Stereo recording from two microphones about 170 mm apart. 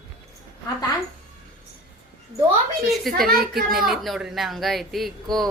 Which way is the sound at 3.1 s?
60° right (ahead or behind).